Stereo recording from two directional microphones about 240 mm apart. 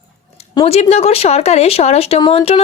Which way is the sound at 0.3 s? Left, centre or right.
Left.